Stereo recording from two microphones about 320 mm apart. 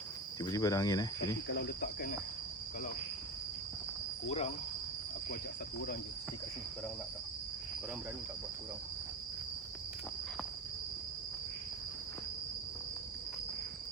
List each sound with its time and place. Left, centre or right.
0.4 s cricket: centre
1.5 s cricket: left
4.3 s cricket: centre